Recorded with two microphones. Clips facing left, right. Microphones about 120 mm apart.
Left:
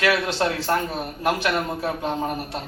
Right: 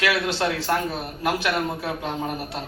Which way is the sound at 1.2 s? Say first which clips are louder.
Left 1 dB; 40° left (ahead or behind).